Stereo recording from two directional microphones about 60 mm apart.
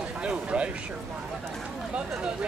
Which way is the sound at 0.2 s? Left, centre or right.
Centre.